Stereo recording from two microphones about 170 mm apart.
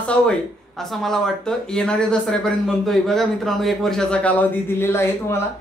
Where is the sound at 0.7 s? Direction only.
Centre (ahead or behind).